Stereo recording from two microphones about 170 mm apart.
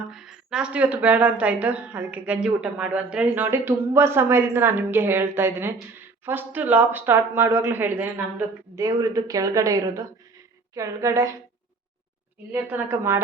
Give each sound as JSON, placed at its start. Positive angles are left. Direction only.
{"t": 0.1, "sound": "a woman's voice", "side_deg": -5}
{"t": 12.5, "sound": "a woman's voice", "side_deg": -10}